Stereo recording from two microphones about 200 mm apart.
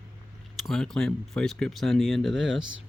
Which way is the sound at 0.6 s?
Centre (ahead or behind).